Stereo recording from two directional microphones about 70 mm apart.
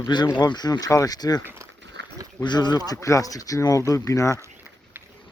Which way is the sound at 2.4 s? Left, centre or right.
Left.